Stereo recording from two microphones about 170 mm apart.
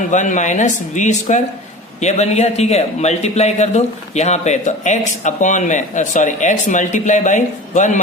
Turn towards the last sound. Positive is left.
turn(degrees=45)  # may be behind; listen again after turning